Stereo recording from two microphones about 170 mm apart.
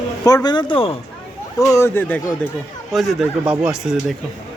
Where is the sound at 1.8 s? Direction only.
15° left (ahead or behind).